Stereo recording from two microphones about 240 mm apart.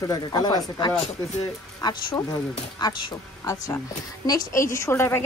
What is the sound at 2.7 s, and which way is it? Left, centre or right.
Speech, centre.